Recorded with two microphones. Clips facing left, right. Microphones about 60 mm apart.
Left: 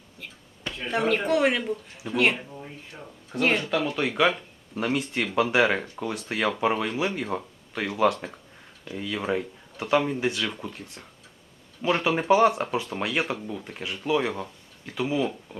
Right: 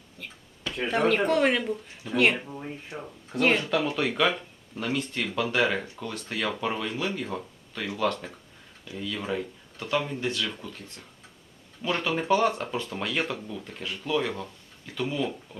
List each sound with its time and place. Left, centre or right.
0.2 s speech: centre
2.9 s speech: right
3.3 s speech: centre
4.7 s speech: left